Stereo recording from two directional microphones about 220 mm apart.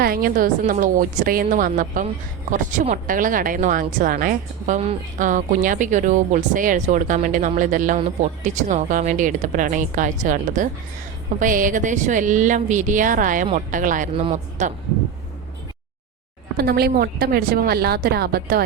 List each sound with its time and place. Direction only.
0.0 s speech: 40° right (ahead or behind)
16.6 s a woman's voice: 45° right (ahead or behind)